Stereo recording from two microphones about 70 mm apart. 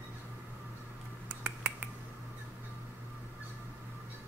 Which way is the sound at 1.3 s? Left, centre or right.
Centre.